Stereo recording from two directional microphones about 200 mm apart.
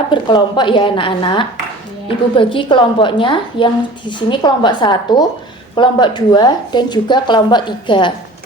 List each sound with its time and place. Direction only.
0.1 s a woman's voice: 25° left (ahead or behind)